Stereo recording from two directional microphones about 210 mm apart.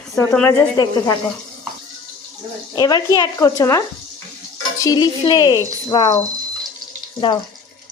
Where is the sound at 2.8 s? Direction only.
20° left (ahead or behind).